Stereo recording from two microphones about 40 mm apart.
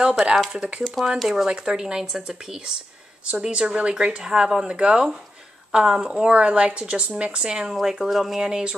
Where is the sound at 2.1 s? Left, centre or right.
Right; by 8.5 s centre.